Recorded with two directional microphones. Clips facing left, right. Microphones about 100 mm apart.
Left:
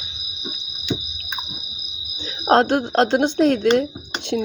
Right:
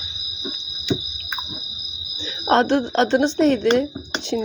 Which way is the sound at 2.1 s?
45° left (ahead or behind).